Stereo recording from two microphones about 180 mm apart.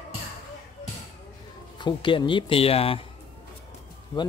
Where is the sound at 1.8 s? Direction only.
25° left (ahead or behind).